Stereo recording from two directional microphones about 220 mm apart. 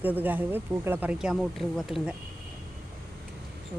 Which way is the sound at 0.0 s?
10° right (ahead or behind).